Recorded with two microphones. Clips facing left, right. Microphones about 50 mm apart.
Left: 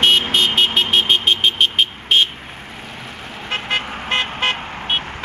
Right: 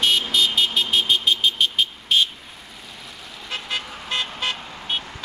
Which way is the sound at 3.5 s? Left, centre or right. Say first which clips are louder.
Left 7 dB; left.